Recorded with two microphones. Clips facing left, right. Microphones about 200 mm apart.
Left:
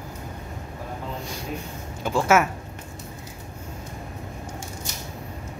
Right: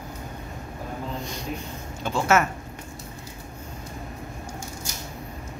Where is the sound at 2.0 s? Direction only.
10° left (ahead or behind).